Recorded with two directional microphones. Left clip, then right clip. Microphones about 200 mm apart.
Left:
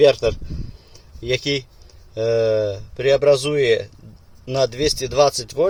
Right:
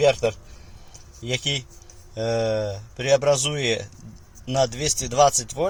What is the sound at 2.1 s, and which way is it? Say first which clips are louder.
Speech: left 6 dB; 25° left (ahead or behind).